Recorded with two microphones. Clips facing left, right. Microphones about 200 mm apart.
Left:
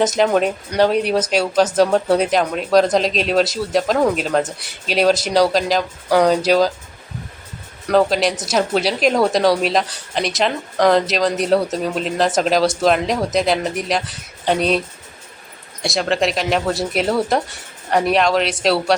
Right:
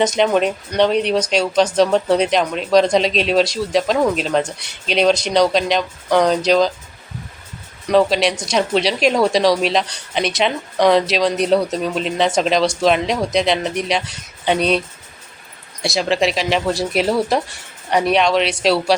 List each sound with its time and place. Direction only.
0.0 s a woman's voice: 5° left (ahead or behind)
7.9 s a woman's voice: centre (ahead or behind)
15.8 s a woman's voice: centre (ahead or behind)